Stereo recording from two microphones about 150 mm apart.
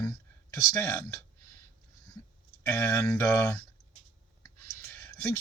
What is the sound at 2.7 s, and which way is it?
Speech, 15° left (ahead or behind).